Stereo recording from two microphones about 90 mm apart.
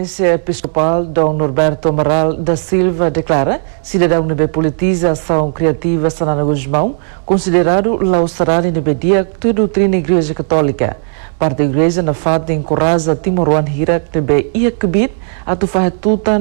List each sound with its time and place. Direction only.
0.2 s a man's voice: 5° left (ahead or behind)